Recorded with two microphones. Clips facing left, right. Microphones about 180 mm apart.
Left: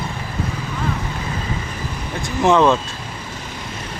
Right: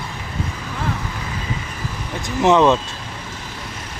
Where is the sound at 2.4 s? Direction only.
20° right (ahead or behind).